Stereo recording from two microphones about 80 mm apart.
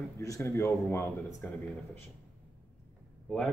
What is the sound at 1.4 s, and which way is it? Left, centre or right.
Speech, left.